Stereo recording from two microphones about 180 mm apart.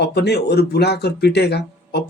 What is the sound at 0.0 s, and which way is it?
Speech, 65° left (ahead or behind).